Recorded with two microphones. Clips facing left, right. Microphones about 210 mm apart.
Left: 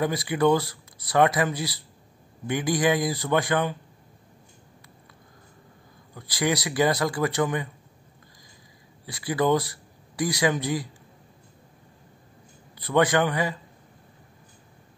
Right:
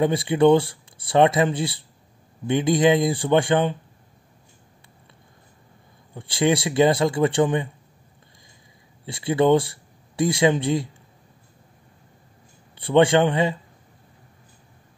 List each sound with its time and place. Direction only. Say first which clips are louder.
0.0 s speech: right 5 dB; 25° right (ahead or behind)
6.1 s speech: right 5 dB; 25° right (ahead or behind)
9.0 s speech: right 5 dB; 25° right (ahead or behind)
12.7 s speech: right 5 dB; 30° right (ahead or behind)